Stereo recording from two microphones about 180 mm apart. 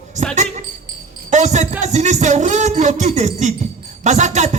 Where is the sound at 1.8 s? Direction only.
40° right (ahead or behind).